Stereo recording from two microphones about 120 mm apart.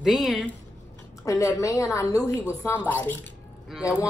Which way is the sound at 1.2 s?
25° left (ahead or behind).